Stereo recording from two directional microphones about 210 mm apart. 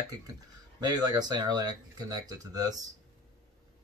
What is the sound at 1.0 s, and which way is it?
Speech, 20° right (ahead or behind).